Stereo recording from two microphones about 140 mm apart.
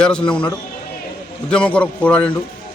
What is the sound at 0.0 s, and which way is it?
A man's voice, 5° left (ahead or behind).